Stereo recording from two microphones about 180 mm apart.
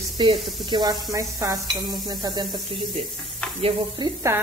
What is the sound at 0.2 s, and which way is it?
A woman's voice, 25° right (ahead or behind).